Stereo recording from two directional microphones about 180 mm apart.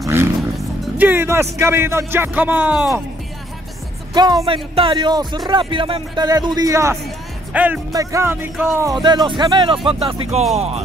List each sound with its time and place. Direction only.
0.0 s music: 15° right (ahead or behind)
0.9 s speech: 10° right (ahead or behind)
4.1 s a man's voice: 20° right (ahead or behind)
9.0 s a man's voice: 25° right (ahead or behind)